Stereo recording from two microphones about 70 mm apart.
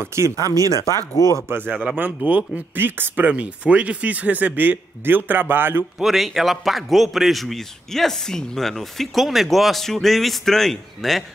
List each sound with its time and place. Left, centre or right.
0.0 s speech: right
0.7 s speech: left
2.0 s speech: right
5.9 s a man's voice: centre